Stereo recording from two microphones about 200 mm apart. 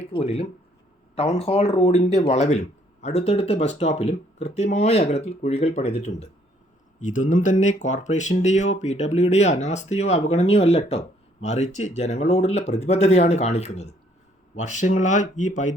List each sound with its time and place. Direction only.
0.1 s speech: 30° left (ahead or behind)